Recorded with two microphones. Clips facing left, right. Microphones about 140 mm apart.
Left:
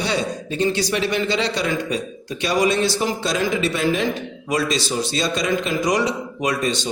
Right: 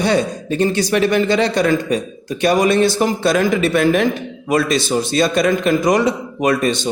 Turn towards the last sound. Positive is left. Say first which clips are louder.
# right 6 dB
turn(degrees=-55)  # may be behind; listen again after turning